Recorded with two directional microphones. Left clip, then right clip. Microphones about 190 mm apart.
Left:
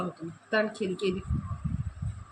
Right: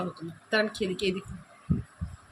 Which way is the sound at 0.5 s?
10° right (ahead or behind).